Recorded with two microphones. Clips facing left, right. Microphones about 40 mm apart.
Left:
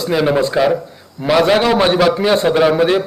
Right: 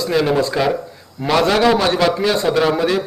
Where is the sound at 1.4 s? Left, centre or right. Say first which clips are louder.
Left 1 dB; left.